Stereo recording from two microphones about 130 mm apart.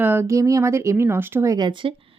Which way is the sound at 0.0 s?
15° right (ahead or behind).